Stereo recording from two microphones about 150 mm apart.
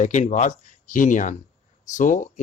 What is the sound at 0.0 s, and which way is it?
Speech, 55° left (ahead or behind).